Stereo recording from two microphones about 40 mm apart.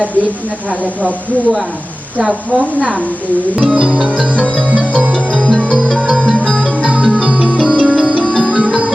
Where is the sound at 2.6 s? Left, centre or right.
Right.